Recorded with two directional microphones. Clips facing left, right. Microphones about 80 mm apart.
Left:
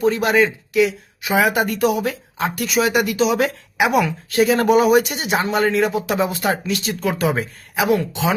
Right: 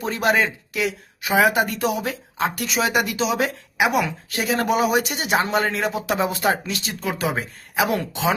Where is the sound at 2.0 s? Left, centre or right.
Right.